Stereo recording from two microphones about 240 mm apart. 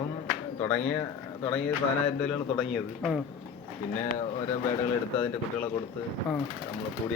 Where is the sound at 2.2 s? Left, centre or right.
Centre.